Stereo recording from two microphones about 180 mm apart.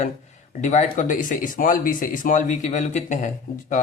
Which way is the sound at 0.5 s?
40° left (ahead or behind).